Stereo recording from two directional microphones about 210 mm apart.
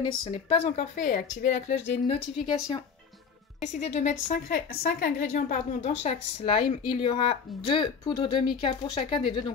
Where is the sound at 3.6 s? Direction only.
35° left (ahead or behind).